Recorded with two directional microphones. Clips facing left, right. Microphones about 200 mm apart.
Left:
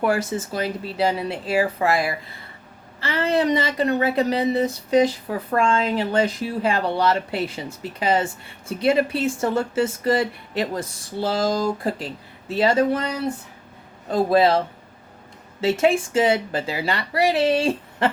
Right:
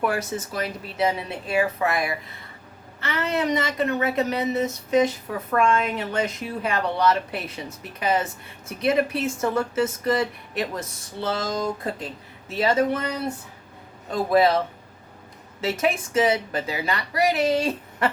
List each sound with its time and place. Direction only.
0.0 s a woman's voice: 30° left (ahead or behind)
14.1 s a woman's voice: 30° left (ahead or behind)
15.6 s a woman's voice: 30° left (ahead or behind)